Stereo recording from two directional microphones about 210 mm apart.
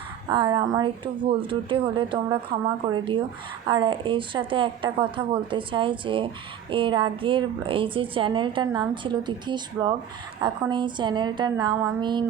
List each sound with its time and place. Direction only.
0.3 s a woman's voice: 25° right (ahead or behind)